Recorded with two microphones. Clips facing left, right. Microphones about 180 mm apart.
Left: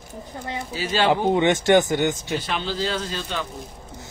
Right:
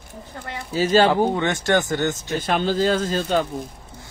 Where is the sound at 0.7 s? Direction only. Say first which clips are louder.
Right 5 dB; 45° right (ahead or behind).